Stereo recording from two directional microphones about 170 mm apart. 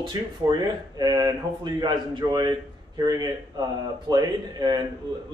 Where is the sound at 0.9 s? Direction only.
25° right (ahead or behind).